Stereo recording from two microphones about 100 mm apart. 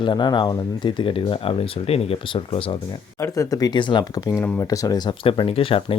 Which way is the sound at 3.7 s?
50° left (ahead or behind).